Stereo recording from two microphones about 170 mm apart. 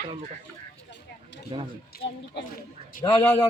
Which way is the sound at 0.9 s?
90° left.